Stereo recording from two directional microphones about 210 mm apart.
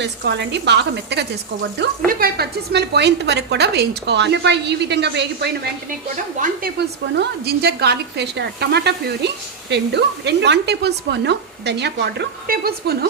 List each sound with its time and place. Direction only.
0.0 s a woman's voice: 55° right (ahead or behind)